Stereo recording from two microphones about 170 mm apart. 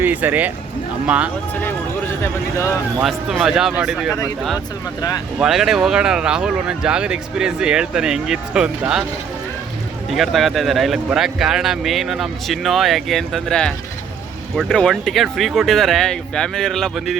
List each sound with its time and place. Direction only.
0.0 s speech: 10° right (ahead or behind)
2.2 s speech: 15° left (ahead or behind)
3.0 s speech: centre (ahead or behind)
5.4 s speech: centre (ahead or behind)
10.1 s speech: centre (ahead or behind)